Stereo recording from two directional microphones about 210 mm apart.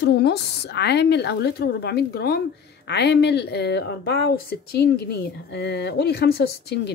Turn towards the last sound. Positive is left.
turn(degrees=50)  # may be behind; listen again after turning